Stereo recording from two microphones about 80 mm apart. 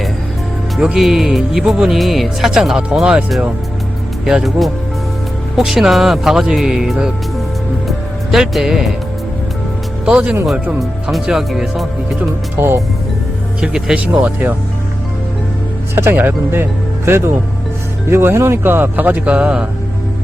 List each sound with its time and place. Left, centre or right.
0.8 s speech: centre
4.3 s speech: centre
7.9 s music: centre
10.1 s speech: centre
12.5 s speech: right
13.6 s speech: centre
16.0 s speech: right